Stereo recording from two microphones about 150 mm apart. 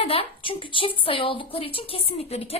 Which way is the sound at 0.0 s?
40° left (ahead or behind).